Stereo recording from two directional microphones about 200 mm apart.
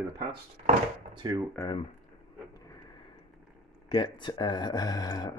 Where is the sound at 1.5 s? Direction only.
20° left (ahead or behind).